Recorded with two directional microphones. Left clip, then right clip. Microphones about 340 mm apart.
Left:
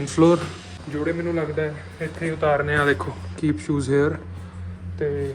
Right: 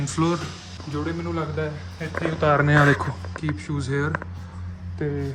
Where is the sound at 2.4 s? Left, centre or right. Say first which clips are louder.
Right 1 dB; right.